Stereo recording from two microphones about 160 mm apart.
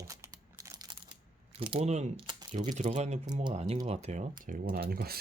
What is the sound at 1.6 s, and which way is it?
Speech, 35° right (ahead or behind).